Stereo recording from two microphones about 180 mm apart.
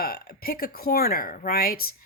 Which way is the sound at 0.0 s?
55° left (ahead or behind).